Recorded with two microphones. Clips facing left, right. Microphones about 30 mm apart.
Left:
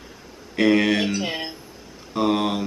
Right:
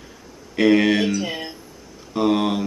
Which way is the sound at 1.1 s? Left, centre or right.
Left.